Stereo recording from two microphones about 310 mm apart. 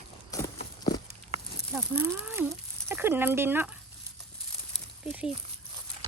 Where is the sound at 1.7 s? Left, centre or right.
Centre.